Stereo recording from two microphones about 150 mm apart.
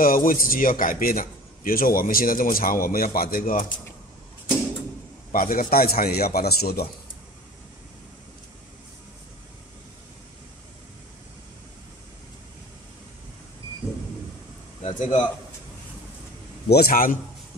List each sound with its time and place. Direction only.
0.0 s a man's voice: 70° left (ahead or behind)
5.3 s speech: 70° left (ahead or behind); by 6.9 s 90° left
14.8 s a sound: 55° left (ahead or behind)
16.6 s a man's voice: 90° left; by 17.2 s 70° left (ahead or behind)